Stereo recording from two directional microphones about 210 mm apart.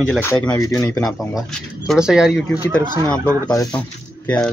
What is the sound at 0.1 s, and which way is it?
Speech, 10° left (ahead or behind).